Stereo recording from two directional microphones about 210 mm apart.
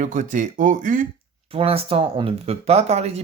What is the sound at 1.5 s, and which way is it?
Speech, 25° right (ahead or behind).